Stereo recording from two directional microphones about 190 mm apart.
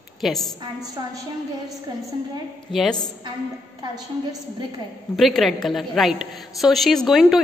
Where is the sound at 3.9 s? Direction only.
20° right (ahead or behind).